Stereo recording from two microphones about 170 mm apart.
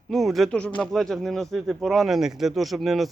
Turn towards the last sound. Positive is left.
turn(degrees=0)  # may be behind; listen again after turning